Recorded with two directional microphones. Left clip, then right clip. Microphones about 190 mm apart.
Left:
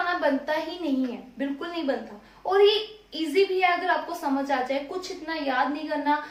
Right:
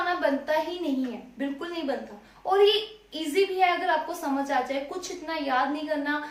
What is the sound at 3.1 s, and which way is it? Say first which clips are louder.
A woman's voice: left 2 dB; 10° left (ahead or behind).